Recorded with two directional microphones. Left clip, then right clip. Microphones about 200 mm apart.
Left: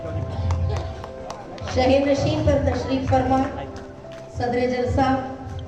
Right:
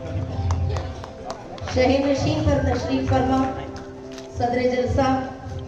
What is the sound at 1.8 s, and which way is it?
Speech, 55° left (ahead or behind).